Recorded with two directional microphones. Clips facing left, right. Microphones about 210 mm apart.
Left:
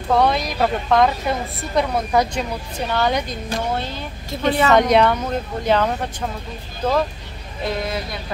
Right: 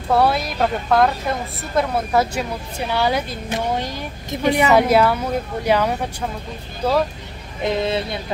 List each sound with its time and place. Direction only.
0.1 s a woman's voice: 5° right (ahead or behind)
3.4 s speech: 15° right (ahead or behind)
7.6 s speech: 25° right (ahead or behind)